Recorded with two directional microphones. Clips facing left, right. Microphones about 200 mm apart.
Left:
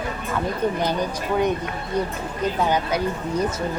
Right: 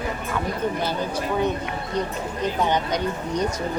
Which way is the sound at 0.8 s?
15° left (ahead or behind).